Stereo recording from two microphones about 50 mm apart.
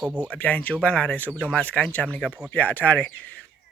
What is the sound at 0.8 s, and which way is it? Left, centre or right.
Speech, left.